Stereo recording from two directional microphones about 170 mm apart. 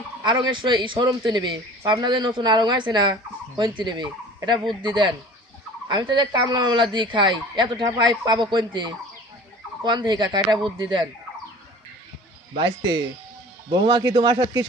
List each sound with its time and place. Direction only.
0.2 s a man's voice: 25° right (ahead or behind)
12.5 s a man's voice: 25° right (ahead or behind)